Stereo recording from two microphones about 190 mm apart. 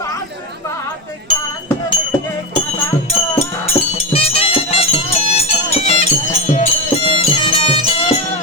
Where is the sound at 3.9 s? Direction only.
30° left (ahead or behind).